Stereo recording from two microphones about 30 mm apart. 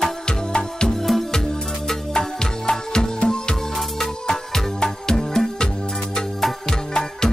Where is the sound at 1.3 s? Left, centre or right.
Centre.